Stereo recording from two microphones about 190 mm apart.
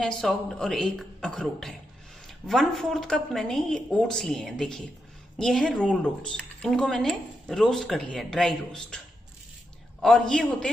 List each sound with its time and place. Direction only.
0.0 s speech: 5° left (ahead or behind)
10.0 s speech: centre (ahead or behind)